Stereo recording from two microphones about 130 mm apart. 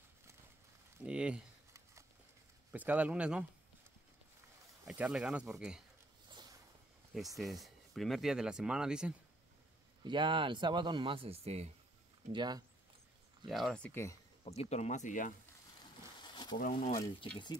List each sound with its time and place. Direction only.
1.0 s a man's voice: 10° right (ahead or behind)
2.7 s a man's voice: 10° right (ahead or behind)
4.8 s speech: 5° right (ahead or behind)
7.3 s speech: centre (ahead or behind)
10.0 s speech: 40° right (ahead or behind)
12.3 s speech: 35° right (ahead or behind)
13.5 s speech: centre (ahead or behind)
14.6 s speech: 60° left (ahead or behind); by 15.3 s 80° left
16.2 s a sound: 35° left (ahead or behind)
16.5 s speech: 85° left